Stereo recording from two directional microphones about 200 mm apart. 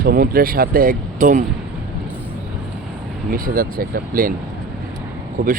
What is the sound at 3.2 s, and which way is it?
Speech, 45° right (ahead or behind).